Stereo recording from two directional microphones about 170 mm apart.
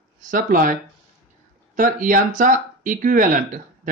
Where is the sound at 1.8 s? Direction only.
50° right (ahead or behind).